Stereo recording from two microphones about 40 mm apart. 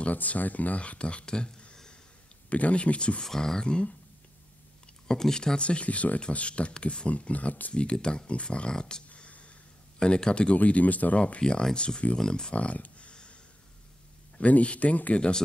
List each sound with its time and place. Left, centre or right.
0.1 s speech: left
3.3 s speech: centre
5.0 s speech: centre
5.6 s speech: left
7.7 s speech: left
9.1 s a sound: left
9.9 s speech: left
10.6 s speech: left
11.1 s speech: left
11.4 s speech: left
12.5 s a sound: left
14.4 s speech: left
15.1 s speech: left